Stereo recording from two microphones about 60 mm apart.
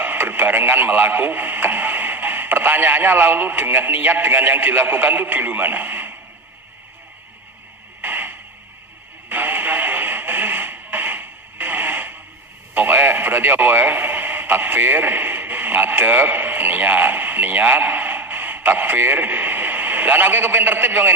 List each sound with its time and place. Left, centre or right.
0.0 s speech: right
8.0 s a sound: right
9.3 s radio: right